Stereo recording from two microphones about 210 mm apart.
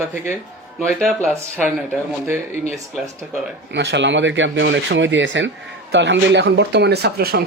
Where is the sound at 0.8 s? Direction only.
5° left (ahead or behind).